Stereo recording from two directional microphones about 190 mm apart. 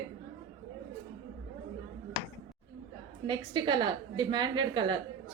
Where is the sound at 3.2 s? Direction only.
25° right (ahead or behind).